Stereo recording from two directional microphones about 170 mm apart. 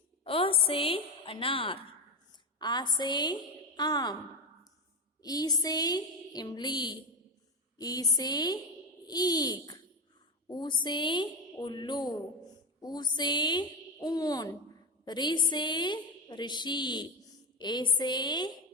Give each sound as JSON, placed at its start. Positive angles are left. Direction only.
{"t": 0.3, "sound": "a woman's voice", "side_deg": 30}
{"t": 5.2, "sound": "a woman's voice", "side_deg": 20}